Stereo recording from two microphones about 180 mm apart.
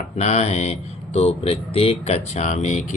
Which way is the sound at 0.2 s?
40° left (ahead or behind).